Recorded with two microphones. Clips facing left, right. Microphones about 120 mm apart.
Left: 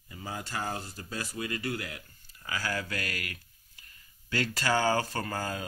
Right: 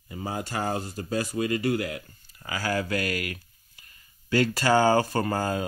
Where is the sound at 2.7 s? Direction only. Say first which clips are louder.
Right 11 dB; 55° right (ahead or behind).